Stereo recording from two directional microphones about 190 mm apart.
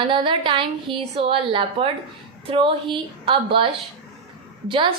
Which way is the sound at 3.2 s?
25° right (ahead or behind).